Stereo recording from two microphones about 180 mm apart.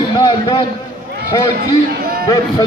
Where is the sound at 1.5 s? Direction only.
55° right (ahead or behind).